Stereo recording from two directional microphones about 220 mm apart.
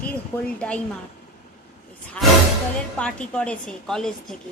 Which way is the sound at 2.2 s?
5° left (ahead or behind).